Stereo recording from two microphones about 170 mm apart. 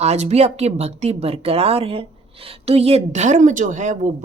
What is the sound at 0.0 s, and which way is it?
A woman's voice, 40° right (ahead or behind).